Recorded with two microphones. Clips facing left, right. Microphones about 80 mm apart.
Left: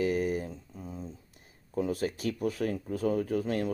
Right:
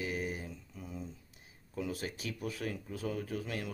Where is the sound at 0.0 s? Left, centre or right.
Left.